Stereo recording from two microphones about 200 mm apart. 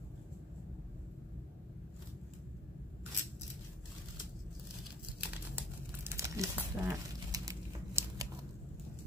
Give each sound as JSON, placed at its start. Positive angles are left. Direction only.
{"t": 5.2, "sound": "crumpling", "side_deg": -10}